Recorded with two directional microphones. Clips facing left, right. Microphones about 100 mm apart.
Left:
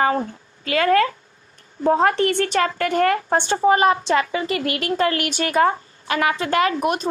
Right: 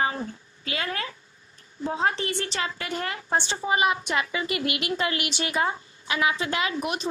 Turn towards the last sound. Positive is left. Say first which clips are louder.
# left 8 dB
turn(degrees=45)  # may be behind; listen again after turning